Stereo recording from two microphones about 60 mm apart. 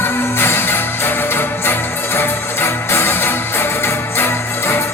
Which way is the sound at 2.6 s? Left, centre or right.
Left.